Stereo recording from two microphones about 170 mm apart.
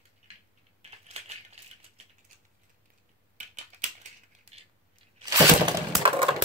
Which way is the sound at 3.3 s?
45° right (ahead or behind).